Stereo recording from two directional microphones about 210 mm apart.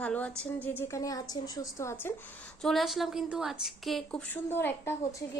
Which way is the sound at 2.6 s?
Centre (ahead or behind).